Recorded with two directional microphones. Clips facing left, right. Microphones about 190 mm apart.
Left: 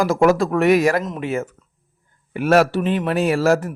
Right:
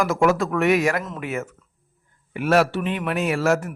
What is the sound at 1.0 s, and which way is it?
Speech, 20° left (ahead or behind).